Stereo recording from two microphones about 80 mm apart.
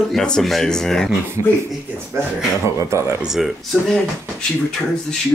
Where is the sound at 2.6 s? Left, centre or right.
Right.